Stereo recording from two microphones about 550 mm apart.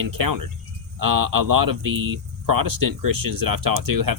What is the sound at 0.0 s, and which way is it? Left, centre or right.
Speech, right.